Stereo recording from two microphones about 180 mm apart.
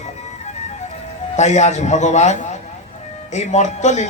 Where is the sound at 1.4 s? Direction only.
40° left (ahead or behind).